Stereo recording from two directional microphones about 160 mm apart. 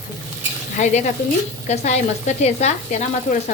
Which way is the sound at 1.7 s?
45° left (ahead or behind).